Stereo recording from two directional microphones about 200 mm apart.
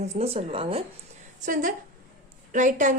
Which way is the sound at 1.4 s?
40° right (ahead or behind).